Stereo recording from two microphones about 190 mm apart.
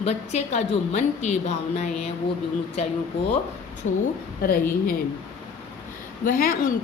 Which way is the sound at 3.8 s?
40° left (ahead or behind).